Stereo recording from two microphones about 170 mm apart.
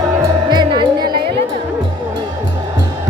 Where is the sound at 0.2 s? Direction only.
25° right (ahead or behind).